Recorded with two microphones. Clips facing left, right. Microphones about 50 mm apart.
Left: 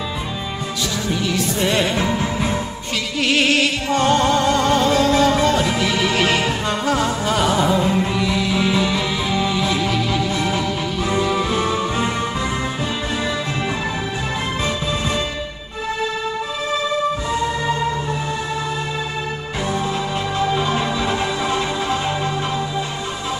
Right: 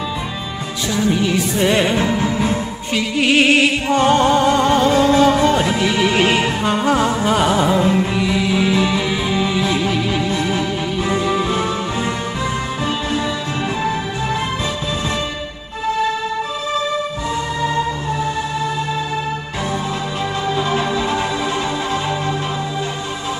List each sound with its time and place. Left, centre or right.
0.9 s music: right
3.2 s music: centre